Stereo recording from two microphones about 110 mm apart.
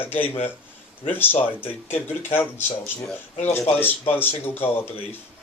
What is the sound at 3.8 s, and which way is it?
Speech, 20° left (ahead or behind).